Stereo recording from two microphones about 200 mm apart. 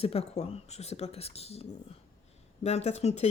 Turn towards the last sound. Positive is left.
turn(degrees=35)  # may be behind; listen again after turning